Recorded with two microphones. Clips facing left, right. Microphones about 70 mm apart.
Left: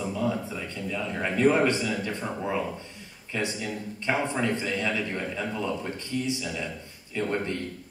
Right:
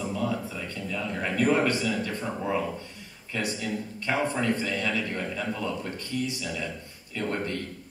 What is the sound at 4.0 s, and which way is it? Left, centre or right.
A man's voice, left.